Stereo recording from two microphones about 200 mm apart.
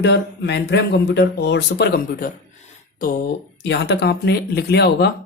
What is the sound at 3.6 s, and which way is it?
A man's voice, 60° left (ahead or behind).